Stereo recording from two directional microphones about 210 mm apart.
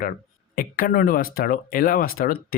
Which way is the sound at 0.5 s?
45° left (ahead or behind).